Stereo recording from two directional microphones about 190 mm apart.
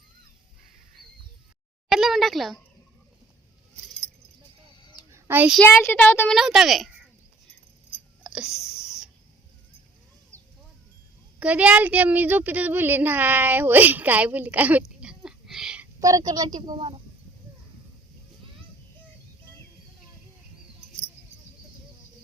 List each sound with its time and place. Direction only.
1.9 s speech: centre (ahead or behind)
5.1 s a sound: 10° right (ahead or behind)
5.5 s speech: 10° left (ahead or behind)
6.3 s speech: centre (ahead or behind)
8.2 s wheeze: 5° right (ahead or behind)
11.3 s a woman's voice: 5° right (ahead or behind)
16.0 s a woman's voice: 20° right (ahead or behind)